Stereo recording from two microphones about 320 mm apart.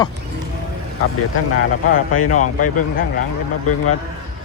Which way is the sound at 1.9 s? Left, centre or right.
Left.